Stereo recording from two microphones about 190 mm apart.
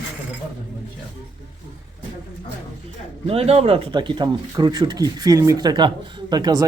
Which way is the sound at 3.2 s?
30° right (ahead or behind).